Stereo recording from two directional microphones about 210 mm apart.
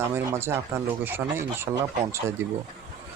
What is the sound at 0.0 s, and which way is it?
Speech, 10° right (ahead or behind).